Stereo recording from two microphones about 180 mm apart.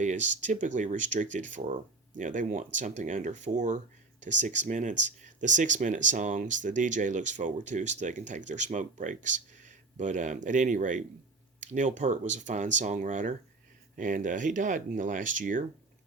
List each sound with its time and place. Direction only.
0.0 s speech: 40° right (ahead or behind)